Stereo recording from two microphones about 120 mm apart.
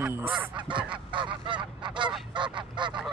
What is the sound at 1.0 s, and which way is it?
Goose, 45° right (ahead or behind).